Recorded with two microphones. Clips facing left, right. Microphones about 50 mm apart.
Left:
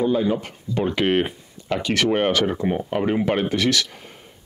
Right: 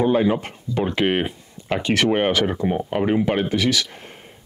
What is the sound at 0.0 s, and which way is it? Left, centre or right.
Speech, right.